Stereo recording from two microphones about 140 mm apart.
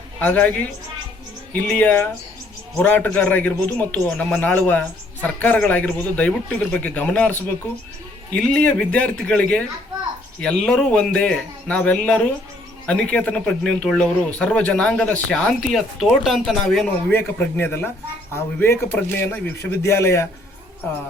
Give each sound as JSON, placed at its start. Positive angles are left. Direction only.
{"t": 0.2, "sound": "a man's voice", "side_deg": 10}